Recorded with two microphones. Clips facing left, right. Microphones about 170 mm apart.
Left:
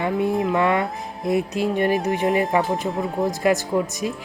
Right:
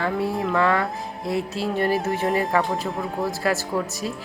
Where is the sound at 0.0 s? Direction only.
20° left (ahead or behind).